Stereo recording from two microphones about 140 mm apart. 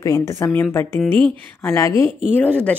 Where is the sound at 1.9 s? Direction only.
45° right (ahead or behind).